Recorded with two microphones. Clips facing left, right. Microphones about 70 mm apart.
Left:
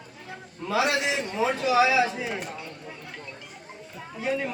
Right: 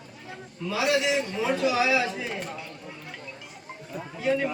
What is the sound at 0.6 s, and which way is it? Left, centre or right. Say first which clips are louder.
Speech: left 3 dB; left.